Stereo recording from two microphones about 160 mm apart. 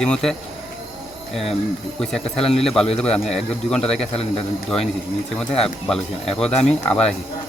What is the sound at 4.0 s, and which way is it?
Speech, 40° left (ahead or behind).